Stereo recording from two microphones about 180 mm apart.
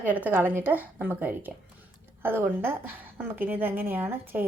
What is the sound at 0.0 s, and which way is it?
Speech, 10° right (ahead or behind).